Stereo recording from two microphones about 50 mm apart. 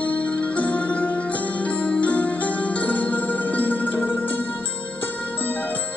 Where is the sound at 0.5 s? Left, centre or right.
Left.